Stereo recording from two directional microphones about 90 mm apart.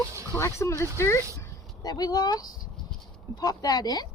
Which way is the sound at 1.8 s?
45° left (ahead or behind).